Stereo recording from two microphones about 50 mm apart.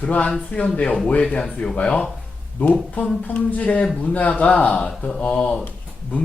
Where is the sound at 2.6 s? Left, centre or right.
Left; by 5.2 s centre.